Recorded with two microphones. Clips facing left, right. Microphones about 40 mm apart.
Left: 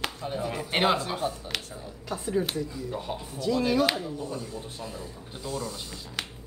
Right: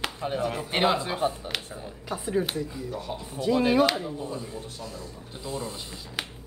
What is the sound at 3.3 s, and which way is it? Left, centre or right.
Speech, right.